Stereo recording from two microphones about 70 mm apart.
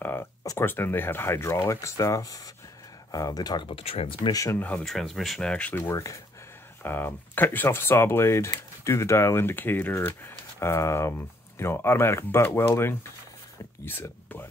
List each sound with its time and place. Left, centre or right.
0.6 s speech: left
4.3 s speech: left
4.6 s speech: centre
4.8 s speech: centre
5.5 s speech: centre
5.8 s speech: left
6.8 s speech: left
9.9 s speech: left